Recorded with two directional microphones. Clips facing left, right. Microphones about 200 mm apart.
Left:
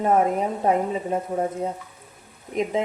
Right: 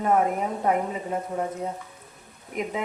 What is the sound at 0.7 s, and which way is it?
Speech, 25° left (ahead or behind).